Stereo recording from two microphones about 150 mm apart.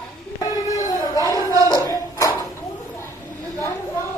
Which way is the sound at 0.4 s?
25° left (ahead or behind).